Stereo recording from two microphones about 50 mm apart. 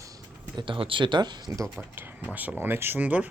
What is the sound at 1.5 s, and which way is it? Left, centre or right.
Speech, right.